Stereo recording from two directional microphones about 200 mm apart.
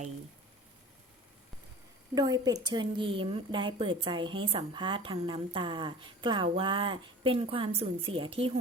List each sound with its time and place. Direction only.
2.1 s a woman's voice: 20° right (ahead or behind)